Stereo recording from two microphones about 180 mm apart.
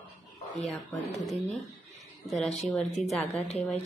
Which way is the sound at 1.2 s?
Centre (ahead or behind).